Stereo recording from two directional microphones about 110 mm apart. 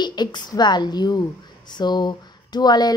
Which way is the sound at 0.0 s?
40° left (ahead or behind).